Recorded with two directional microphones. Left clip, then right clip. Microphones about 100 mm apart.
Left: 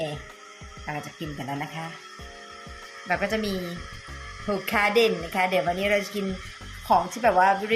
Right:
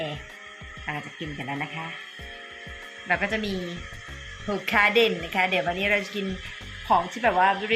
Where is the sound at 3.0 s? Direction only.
15° left (ahead or behind).